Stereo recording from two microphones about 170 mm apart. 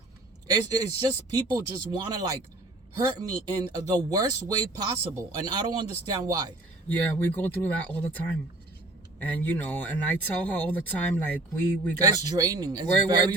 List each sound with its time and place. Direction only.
0.4 s speech: 20° right (ahead or behind)
6.8 s speech: 10° left (ahead or behind)
11.9 s speech: 20° right (ahead or behind)